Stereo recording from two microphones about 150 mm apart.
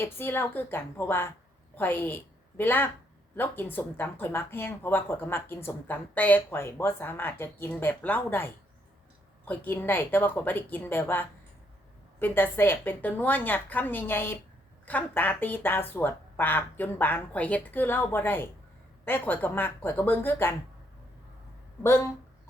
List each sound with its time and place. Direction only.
0.0 s a woman's voice: 15° left (ahead or behind)
9.5 s speech: 15° left (ahead or behind)